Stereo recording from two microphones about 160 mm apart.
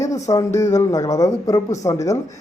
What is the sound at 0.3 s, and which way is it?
A woman's voice, 20° left (ahead or behind).